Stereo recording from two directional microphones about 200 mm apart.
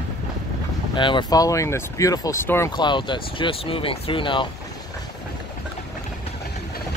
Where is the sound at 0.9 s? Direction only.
25° left (ahead or behind).